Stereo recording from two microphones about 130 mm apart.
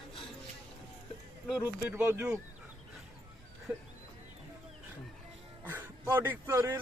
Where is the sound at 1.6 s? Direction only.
15° right (ahead or behind).